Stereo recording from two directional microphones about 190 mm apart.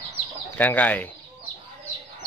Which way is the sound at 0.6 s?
10° left (ahead or behind).